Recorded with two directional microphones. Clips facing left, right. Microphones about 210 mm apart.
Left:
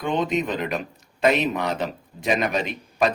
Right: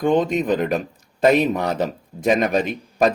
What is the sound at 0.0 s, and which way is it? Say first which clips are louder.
Speech: right 5 dB; 45° right (ahead or behind).